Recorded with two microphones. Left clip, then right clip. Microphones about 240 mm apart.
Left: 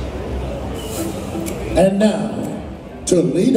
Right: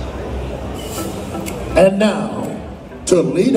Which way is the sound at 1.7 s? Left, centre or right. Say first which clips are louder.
Right 3 dB; right.